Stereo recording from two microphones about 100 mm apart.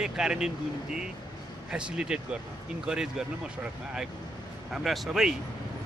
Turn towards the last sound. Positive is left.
turn(degrees=-5)  # may be behind; listen again after turning